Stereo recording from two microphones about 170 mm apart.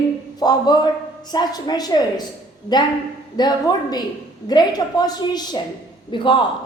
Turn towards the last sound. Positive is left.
turn(degrees=30)  # may be behind; listen again after turning